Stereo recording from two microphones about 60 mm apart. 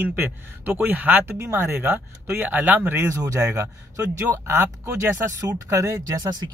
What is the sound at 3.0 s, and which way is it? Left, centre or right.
Speech, right.